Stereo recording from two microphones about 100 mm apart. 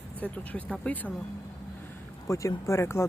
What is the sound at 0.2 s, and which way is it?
Speech, 15° left (ahead or behind).